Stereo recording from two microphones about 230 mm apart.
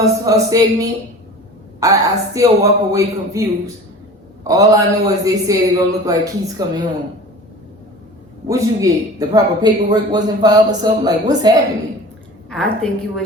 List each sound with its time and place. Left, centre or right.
0.0 s speech: centre
4.4 s speech: centre
8.4 s speech: centre
12.5 s a woman's voice: centre